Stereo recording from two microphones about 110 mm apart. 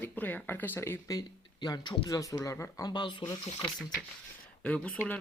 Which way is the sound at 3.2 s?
25° left (ahead or behind).